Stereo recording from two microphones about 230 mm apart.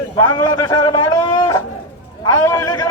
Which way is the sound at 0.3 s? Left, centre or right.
Centre.